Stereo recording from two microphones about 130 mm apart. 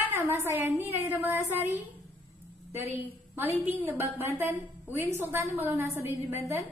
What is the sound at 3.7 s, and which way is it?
A woman's voice, 15° right (ahead or behind).